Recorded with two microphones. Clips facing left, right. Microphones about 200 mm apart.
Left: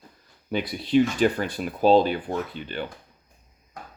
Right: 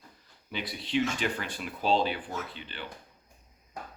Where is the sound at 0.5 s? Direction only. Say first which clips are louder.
Left 9 dB; 45° left (ahead or behind).